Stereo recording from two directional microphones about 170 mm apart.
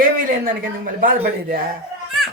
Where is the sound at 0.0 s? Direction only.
55° right (ahead or behind).